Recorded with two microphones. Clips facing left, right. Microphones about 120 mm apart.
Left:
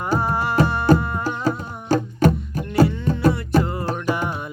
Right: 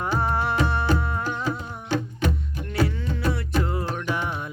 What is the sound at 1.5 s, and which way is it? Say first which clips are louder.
Music: left 6 dB; 40° left (ahead or behind).